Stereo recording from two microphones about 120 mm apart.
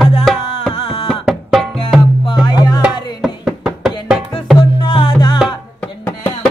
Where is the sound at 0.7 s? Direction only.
55° left (ahead or behind).